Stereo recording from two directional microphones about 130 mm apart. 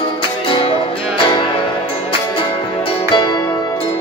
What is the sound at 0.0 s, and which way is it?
Music, 40° left (ahead or behind).